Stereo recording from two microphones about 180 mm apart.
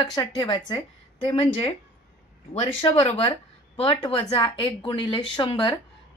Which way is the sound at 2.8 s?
35° left (ahead or behind).